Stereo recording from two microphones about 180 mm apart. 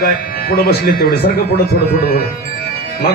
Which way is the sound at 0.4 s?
60° left (ahead or behind).